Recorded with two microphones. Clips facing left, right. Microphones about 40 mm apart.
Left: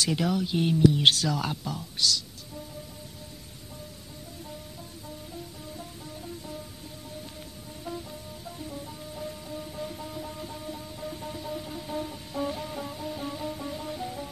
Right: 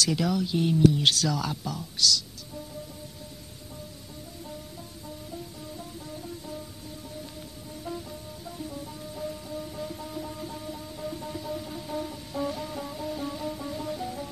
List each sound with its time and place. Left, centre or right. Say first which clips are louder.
0.2 s speech: even; centre
5.8 s music: right 2 dB; centre
7.8 s music: even; centre